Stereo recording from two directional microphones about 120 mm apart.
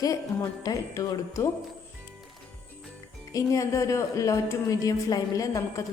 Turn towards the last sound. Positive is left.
turn(degrees=30)  # may be behind; listen again after turning